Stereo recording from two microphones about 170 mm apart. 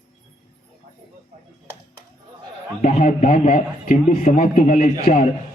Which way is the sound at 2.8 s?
45° left (ahead or behind).